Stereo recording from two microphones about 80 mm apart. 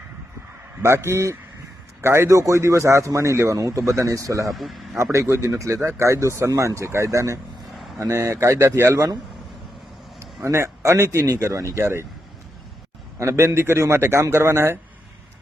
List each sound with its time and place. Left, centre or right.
0.8 s a man's voice: right
4.5 s a man's voice: centre
5.1 s a man's voice: right
10.2 s a man's voice: right
13.1 s a man's voice: right